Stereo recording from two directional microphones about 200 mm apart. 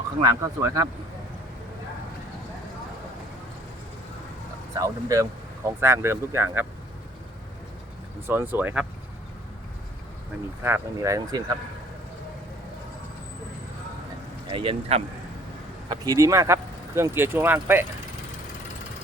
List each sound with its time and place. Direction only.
0.2 s speech: 15° right (ahead or behind)
4.8 s speech: 15° right (ahead or behind)
8.3 s speech: 10° right (ahead or behind)
10.6 s speech: 10° right (ahead or behind)
14.5 s speech: 25° right (ahead or behind)
15.9 s speech: 20° right (ahead or behind)